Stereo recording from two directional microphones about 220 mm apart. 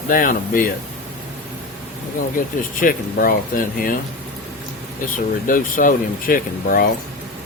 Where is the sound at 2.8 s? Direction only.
40° left (ahead or behind).